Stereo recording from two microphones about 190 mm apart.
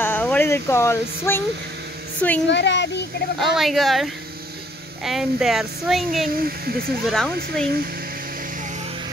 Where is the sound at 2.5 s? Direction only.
65° left (ahead or behind).